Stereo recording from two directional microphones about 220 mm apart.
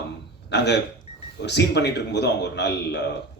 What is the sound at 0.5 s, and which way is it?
Speech, 50° left (ahead or behind).